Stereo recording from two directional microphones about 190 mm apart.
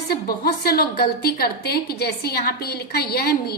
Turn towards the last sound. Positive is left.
turn(degrees=55)  # may be behind; listen again after turning